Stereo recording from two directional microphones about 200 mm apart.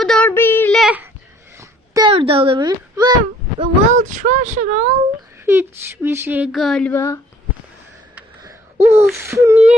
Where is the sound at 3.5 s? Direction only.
35° right (ahead or behind).